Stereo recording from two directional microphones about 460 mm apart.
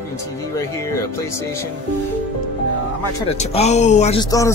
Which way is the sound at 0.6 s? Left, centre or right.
Centre.